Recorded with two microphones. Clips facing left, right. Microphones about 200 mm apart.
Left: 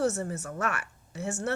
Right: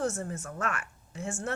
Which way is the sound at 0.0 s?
70° left (ahead or behind).